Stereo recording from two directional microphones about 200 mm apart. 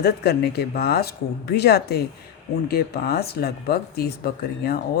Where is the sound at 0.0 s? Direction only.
55° left (ahead or behind).